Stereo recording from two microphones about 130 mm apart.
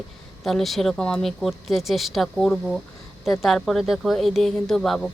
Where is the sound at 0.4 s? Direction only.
Centre (ahead or behind).